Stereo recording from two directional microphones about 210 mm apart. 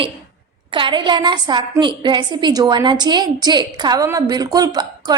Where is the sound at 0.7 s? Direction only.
20° right (ahead or behind).